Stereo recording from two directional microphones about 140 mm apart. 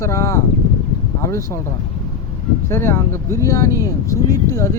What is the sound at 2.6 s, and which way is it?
Speech, 20° left (ahead or behind).